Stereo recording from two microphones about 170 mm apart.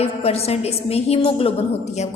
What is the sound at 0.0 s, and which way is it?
A woman's voice, 35° left (ahead or behind).